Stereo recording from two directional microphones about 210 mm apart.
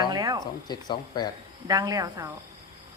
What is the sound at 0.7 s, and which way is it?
Speech, 20° left (ahead or behind).